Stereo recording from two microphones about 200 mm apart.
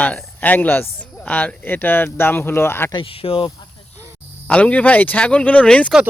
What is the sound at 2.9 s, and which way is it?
Speech, 25° left (ahead or behind).